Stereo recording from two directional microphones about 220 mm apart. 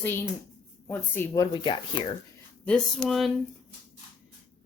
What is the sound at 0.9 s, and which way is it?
Speech, 10° left (ahead or behind).